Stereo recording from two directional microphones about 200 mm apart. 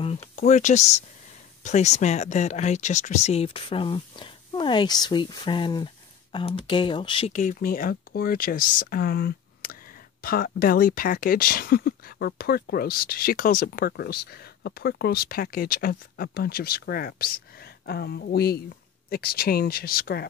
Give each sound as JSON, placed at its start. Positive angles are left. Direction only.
{"t": 0.0, "sound": "speech", "side_deg": 35}